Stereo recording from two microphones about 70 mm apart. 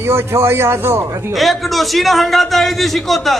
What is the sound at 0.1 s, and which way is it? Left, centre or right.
Speech, right.